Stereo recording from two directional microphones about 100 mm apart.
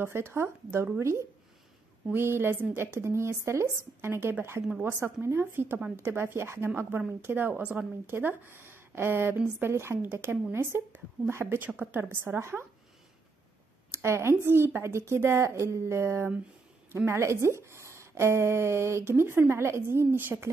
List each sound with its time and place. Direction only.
0.0 s speech: 25° right (ahead or behind)
13.9 s speech: 25° right (ahead or behind)